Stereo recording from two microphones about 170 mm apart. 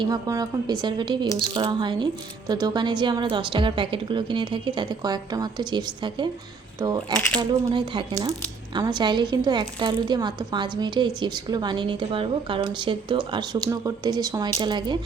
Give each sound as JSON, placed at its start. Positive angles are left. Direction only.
{"t": 0.0, "sound": "speech", "side_deg": -20}